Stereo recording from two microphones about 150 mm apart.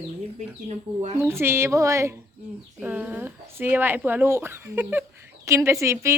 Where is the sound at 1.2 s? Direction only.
15° right (ahead or behind).